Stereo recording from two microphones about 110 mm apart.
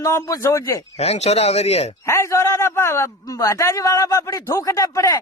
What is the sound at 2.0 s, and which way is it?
A man's voice, 25° left (ahead or behind).